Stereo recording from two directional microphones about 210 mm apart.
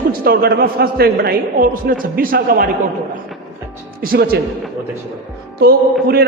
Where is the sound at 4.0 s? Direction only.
45° right (ahead or behind).